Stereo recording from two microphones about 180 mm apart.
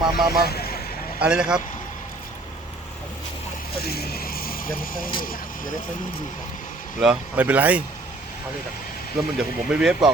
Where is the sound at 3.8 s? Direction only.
60° left (ahead or behind).